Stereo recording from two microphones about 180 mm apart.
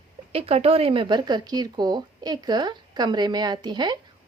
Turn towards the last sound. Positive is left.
turn(degrees=-25)  # may be behind; listen again after turning